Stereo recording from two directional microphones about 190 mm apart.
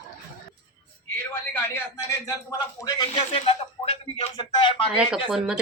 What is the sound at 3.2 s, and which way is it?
Speech, 30° left (ahead or behind).